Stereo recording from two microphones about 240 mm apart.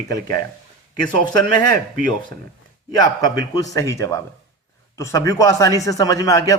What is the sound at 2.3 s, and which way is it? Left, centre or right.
Speech, centre.